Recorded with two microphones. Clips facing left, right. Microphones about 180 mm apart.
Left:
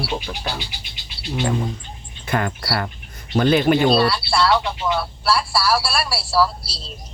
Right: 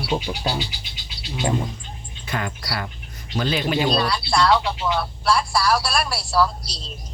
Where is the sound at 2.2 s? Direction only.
50° left (ahead or behind).